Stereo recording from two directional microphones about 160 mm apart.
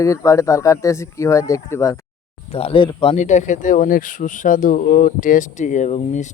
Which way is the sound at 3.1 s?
45° left (ahead or behind).